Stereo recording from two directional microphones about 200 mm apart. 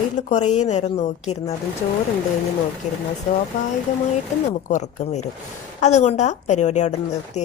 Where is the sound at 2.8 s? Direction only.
35° left (ahead or behind).